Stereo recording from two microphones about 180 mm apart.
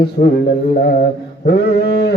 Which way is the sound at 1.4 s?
65° left (ahead or behind).